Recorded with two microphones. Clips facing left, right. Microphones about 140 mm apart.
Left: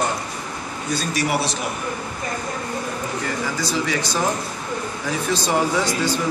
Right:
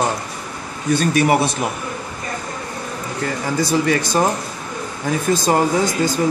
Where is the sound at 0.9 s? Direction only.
60° right (ahead or behind).